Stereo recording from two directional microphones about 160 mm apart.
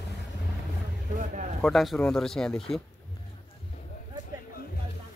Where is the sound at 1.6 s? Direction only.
Centre (ahead or behind).